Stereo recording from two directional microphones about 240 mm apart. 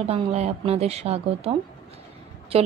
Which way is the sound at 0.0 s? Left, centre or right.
Right.